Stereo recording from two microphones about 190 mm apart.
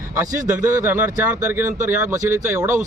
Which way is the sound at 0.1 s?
15° right (ahead or behind).